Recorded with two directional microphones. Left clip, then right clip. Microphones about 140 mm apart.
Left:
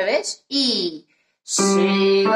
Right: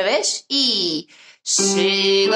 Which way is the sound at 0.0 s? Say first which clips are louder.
Right 2 dB; 35° right (ahead or behind).